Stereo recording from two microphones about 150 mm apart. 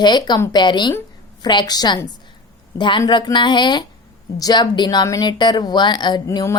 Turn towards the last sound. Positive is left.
turn(degrees=20)  # may be behind; listen again after turning